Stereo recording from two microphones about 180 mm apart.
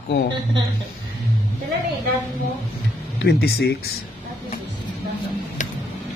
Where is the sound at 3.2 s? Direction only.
60° left (ahead or behind).